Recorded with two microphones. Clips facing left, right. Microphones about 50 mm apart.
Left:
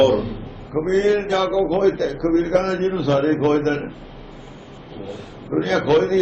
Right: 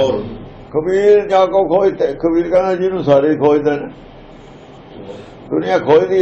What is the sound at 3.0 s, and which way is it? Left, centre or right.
Speech, centre.